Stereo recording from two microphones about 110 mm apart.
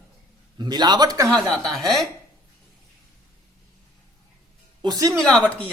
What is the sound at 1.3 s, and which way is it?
Speech, 5° left (ahead or behind).